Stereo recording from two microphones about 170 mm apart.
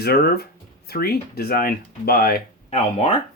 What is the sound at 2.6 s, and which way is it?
Speech, 40° left (ahead or behind).